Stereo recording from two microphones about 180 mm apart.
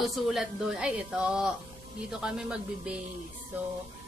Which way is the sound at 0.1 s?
Centre (ahead or behind).